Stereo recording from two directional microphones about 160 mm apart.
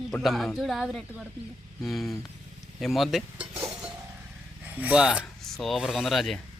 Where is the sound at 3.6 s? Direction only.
10° right (ahead or behind).